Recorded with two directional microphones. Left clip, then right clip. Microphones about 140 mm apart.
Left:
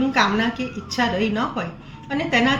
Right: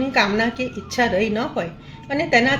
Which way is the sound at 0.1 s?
45° right (ahead or behind).